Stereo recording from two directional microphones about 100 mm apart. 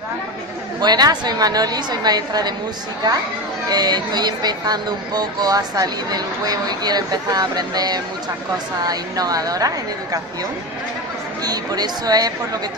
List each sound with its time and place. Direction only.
0.7 s a woman's voice: 40° right (ahead or behind)
3.6 s speech: 40° right (ahead or behind)
11.4 s speech: 40° right (ahead or behind)